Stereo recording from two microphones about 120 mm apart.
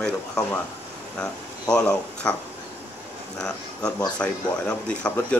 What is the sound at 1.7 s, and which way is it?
Speech, 10° left (ahead or behind).